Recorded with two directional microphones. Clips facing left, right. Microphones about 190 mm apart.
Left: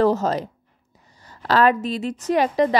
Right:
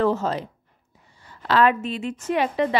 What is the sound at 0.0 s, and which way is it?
Speech, 40° left (ahead or behind).